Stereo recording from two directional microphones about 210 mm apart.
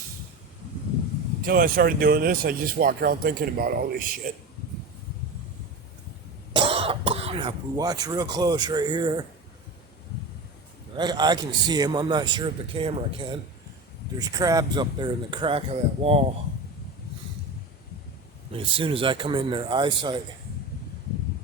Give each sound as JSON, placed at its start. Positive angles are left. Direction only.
{"t": 1.4, "sound": "speech", "side_deg": -45}
{"t": 6.5, "sound": "speech", "side_deg": -25}
{"t": 10.9, "sound": "a man's voice", "side_deg": -20}
{"t": 18.5, "sound": "a man's voice", "side_deg": -25}